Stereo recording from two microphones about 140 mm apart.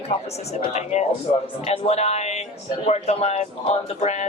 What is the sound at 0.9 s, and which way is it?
Speech, 50° left (ahead or behind).